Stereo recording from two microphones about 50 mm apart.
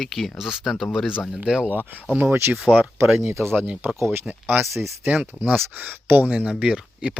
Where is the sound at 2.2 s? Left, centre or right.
Right.